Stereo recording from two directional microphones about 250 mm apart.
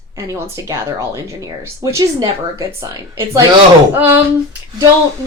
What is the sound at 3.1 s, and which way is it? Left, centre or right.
Speech, centre.